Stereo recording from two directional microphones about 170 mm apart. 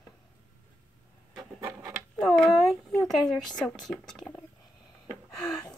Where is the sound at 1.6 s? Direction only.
5° right (ahead or behind).